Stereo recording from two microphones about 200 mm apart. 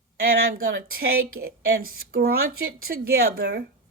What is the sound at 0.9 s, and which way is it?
Speech, 45° right (ahead or behind).